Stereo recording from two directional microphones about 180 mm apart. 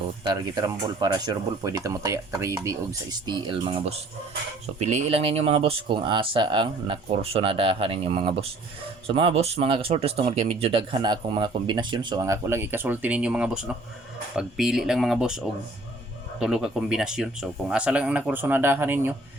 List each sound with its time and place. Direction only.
0.3 s speech: 20° right (ahead or behind)